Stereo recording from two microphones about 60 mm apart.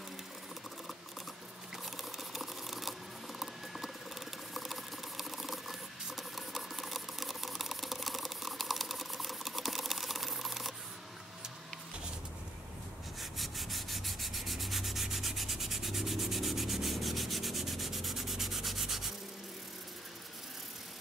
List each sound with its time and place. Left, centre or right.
2.1 s patter: centre
13.2 s rub: centre